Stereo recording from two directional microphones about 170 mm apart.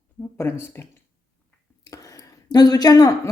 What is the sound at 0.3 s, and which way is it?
Speech, 15° left (ahead or behind).